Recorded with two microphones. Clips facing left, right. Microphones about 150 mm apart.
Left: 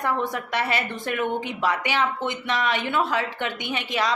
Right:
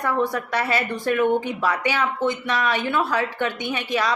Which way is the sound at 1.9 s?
20° left (ahead or behind).